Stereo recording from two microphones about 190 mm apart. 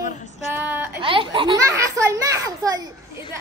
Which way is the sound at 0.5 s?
10° right (ahead or behind).